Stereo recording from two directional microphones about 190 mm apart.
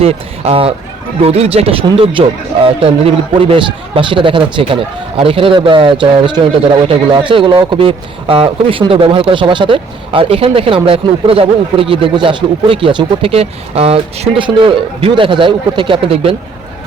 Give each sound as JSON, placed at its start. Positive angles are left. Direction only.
{"t": 0.0, "sound": "a man's voice", "side_deg": -30}